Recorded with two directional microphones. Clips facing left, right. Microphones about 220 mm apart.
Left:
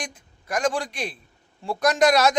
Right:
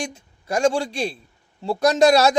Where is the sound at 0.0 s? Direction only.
25° right (ahead or behind).